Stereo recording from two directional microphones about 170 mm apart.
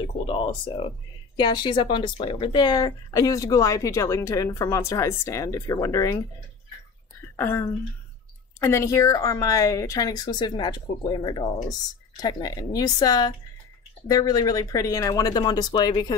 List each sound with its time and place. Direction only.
0.0 s speech: 30° left (ahead or behind)
7.2 s a sound: 15° left (ahead or behind)
8.5 s speech: 15° left (ahead or behind)